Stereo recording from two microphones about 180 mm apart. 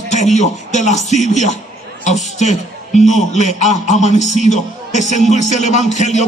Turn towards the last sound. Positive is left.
turn(degrees=40)  # may be behind; listen again after turning